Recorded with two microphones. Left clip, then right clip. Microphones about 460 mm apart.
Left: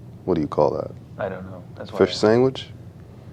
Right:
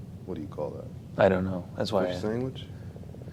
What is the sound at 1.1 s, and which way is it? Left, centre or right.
Speech, right.